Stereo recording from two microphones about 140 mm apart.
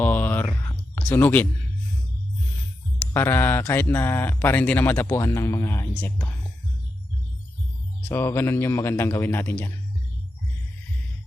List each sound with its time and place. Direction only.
0.0 s a sound: 15° left (ahead or behind)
3.1 s speech: 15° left (ahead or behind)
8.0 s speech: 15° left (ahead or behind)